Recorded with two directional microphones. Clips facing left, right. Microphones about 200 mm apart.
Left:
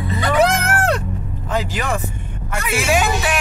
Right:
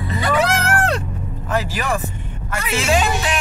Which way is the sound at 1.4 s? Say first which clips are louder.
Even; 20° left (ahead or behind).